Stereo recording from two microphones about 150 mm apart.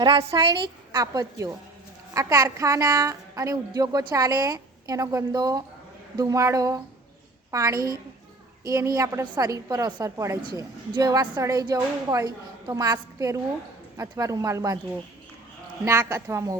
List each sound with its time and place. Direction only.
0.3 s a woman's voice: 30° right (ahead or behind)
15.8 s a woman's voice: 20° right (ahead or behind)